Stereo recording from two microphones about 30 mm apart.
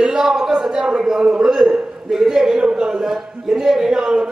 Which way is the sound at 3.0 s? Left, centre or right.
Centre.